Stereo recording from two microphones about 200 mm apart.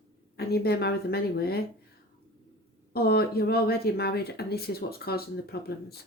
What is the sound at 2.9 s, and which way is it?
Speech, 50° left (ahead or behind).